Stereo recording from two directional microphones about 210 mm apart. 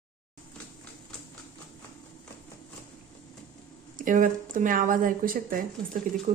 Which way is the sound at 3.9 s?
40° right (ahead or behind).